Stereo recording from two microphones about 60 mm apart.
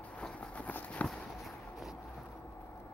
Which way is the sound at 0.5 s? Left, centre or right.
Left.